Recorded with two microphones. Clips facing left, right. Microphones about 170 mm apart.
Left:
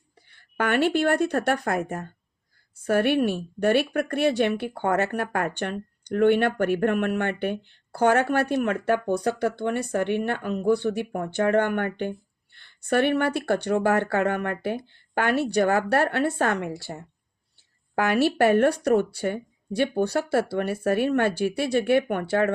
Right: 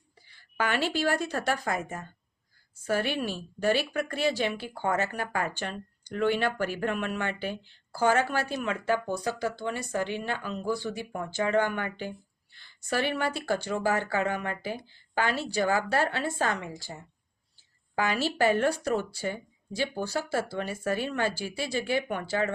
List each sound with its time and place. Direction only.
0.3 s speech: 60° left (ahead or behind)